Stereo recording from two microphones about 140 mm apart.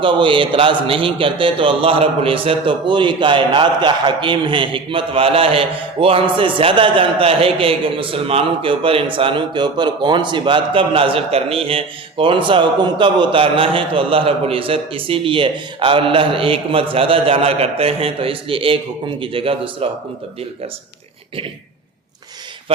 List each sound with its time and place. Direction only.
0.0 s a man's voice: 35° right (ahead or behind)